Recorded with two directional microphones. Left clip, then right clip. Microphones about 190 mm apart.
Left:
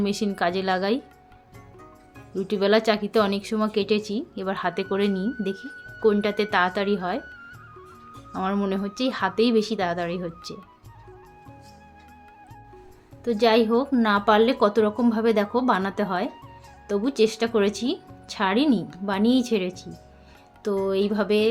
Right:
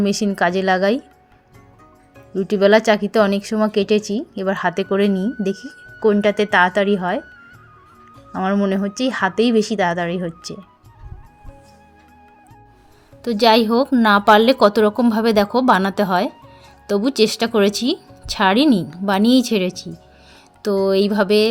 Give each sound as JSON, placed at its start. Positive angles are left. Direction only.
{"t": 0.0, "sound": "a woman's voice", "side_deg": -35}
{"t": 2.5, "sound": "a woman's voice", "side_deg": -35}
{"t": 5.5, "sound": "music", "side_deg": 0}
{"t": 6.0, "sound": "a woman's voice", "side_deg": -35}
{"t": 8.4, "sound": "a woman's voice", "side_deg": -30}
{"t": 13.2, "sound": "a woman's voice", "side_deg": -55}